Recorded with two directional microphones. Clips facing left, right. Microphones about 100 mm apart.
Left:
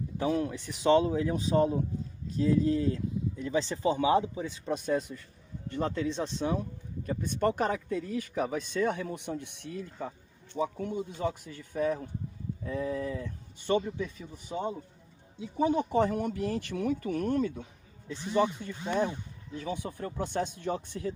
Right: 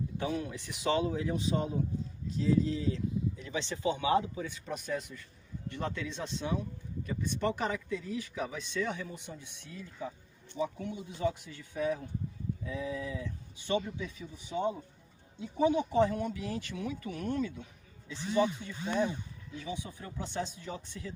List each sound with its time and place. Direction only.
0.3 s speech: 35° left (ahead or behind); by 10.1 s 55° left (ahead or behind)
10.5 s speech: 45° left (ahead or behind)
15.6 s speech: 45° left (ahead or behind)